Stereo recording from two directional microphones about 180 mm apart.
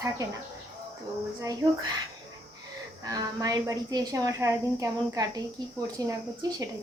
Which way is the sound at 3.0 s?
20° right (ahead or behind).